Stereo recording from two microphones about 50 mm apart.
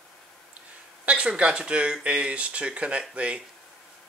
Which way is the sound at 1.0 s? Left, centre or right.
Right.